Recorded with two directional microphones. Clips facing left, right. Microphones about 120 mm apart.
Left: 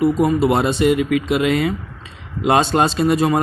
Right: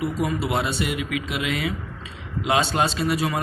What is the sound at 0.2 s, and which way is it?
Speech, 45° left (ahead or behind).